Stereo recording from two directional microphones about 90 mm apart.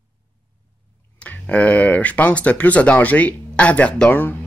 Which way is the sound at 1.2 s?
15° left (ahead or behind).